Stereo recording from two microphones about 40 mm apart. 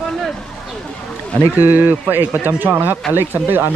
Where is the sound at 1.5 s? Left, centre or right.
Right.